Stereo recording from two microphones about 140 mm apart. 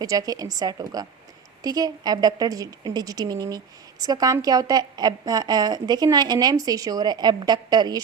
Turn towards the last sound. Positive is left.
turn(degrees=-30)  # may be behind; listen again after turning